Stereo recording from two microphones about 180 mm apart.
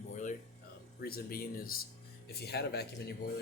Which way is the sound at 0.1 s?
45° left (ahead or behind).